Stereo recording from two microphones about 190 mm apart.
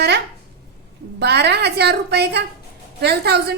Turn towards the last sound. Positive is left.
turn(degrees=-60)  # may be behind; listen again after turning